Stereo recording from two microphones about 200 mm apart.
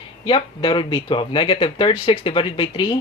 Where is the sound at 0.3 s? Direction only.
25° left (ahead or behind).